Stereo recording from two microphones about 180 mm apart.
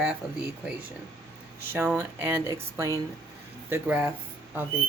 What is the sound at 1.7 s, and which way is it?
Speech, 10° right (ahead or behind).